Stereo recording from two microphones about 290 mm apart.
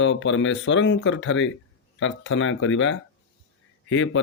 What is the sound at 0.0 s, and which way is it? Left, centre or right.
Speech, left.